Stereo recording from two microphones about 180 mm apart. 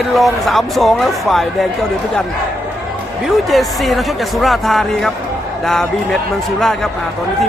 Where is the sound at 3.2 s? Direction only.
Centre (ahead or behind).